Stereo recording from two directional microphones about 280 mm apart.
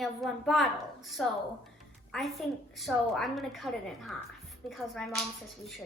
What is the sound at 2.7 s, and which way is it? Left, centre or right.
A woman's voice, centre.